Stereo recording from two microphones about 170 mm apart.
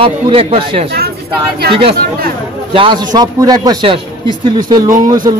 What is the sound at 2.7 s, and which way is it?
A man's voice, 30° right (ahead or behind).